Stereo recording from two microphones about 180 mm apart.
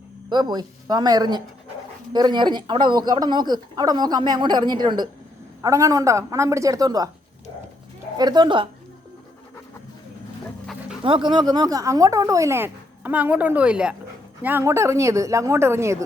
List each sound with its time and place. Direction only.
0.3 s speech: 25° right (ahead or behind)
8.2 s speech: 25° right (ahead or behind)
11.0 s speech: 25° right (ahead or behind)